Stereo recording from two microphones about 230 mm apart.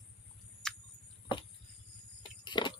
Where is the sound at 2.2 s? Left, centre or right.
Centre.